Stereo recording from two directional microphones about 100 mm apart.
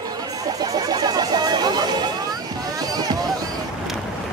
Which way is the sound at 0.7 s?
40° right (ahead or behind).